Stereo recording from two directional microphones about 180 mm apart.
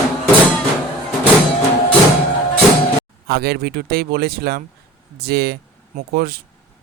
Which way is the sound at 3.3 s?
60° right (ahead or behind).